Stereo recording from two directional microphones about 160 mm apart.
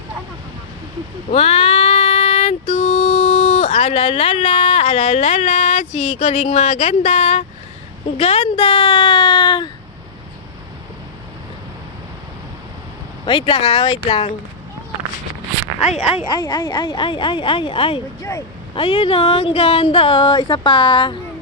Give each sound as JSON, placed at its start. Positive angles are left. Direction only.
{"t": 1.3, "sound": "child singing", "side_deg": 40}
{"t": 8.2, "sound": "a woman's voice", "side_deg": 40}
{"t": 13.2, "sound": "speech", "side_deg": 30}
{"t": 15.8, "sound": "speech", "side_deg": 40}
{"t": 16.3, "sound": "speech", "side_deg": 25}
{"t": 18.2, "sound": "speech", "side_deg": 20}
{"t": 18.7, "sound": "speech", "side_deg": 30}